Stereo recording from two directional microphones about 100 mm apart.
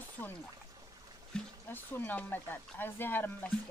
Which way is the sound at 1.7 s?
20° left (ahead or behind).